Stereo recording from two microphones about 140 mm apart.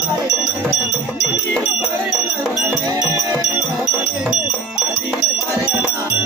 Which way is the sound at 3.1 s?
20° right (ahead or behind).